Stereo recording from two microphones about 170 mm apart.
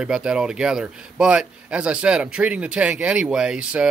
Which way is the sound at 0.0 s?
5° right (ahead or behind).